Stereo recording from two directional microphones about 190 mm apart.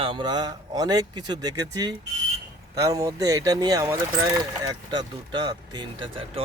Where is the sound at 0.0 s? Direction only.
25° right (ahead or behind).